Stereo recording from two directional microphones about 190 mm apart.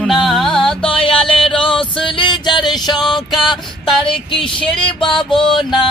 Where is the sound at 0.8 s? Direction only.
25° left (ahead or behind).